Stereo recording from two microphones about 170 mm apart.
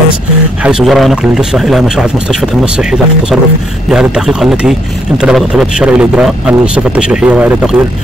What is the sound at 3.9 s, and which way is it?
A man's voice, 5° right (ahead or behind).